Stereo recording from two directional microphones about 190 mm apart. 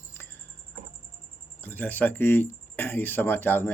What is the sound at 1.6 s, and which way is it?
Speech, 10° left (ahead or behind).